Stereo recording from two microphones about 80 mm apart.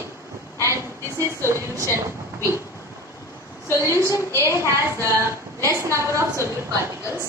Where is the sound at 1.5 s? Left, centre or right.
Right.